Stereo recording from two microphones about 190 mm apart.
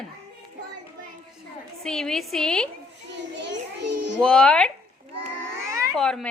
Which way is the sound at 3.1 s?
65° right (ahead or behind).